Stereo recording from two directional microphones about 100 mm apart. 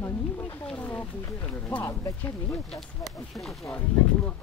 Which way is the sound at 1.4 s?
15° left (ahead or behind).